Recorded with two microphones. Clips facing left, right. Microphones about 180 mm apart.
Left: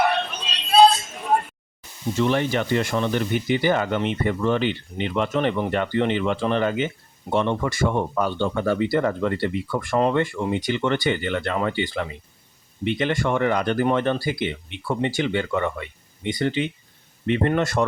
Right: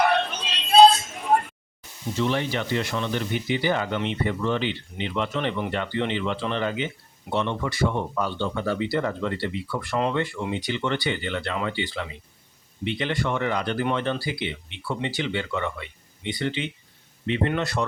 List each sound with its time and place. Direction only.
2.1 s speech: 50° left (ahead or behind)